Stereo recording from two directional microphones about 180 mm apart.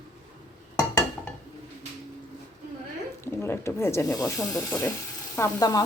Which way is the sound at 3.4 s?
15° left (ahead or behind).